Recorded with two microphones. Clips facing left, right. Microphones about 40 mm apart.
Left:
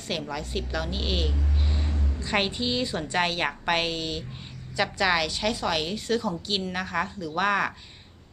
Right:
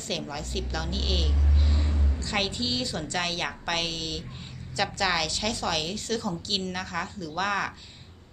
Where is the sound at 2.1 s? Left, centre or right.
Centre.